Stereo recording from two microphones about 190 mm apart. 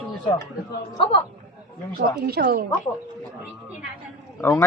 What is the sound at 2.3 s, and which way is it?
Speech, 50° right (ahead or behind).